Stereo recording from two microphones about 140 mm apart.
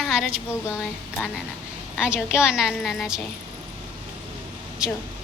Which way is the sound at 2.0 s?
10° right (ahead or behind).